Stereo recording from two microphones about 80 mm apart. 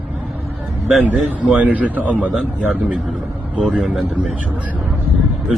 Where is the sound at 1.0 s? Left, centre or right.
Centre.